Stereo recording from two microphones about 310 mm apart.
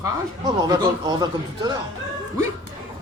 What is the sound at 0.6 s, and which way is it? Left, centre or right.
A man's voice, centre.